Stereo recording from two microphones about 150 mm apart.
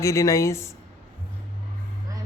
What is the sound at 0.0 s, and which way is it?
Speech, 20° left (ahead or behind).